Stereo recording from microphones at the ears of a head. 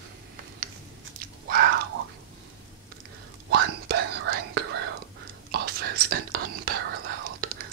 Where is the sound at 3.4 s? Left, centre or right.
Right.